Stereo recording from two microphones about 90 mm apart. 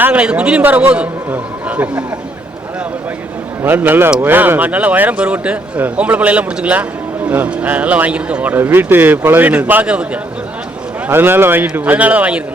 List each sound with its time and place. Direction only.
0.0 s a man's voice: 15° right (ahead or behind)
3.6 s a man's voice: 25° right (ahead or behind)
11.1 s a man's voice: 25° right (ahead or behind)
11.6 s a man's voice: 15° right (ahead or behind)